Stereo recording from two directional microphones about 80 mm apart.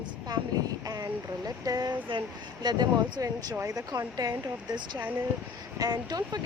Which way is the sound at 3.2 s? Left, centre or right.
Right.